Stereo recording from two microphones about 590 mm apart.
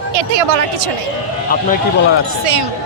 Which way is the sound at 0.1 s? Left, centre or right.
Right.